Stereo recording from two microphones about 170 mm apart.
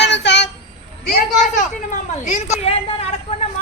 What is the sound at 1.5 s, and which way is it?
A woman's voice, 45° left (ahead or behind).